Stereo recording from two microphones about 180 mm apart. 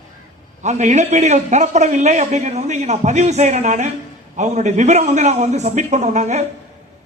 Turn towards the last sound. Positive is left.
turn(degrees=-40)  # may be behind; listen again after turning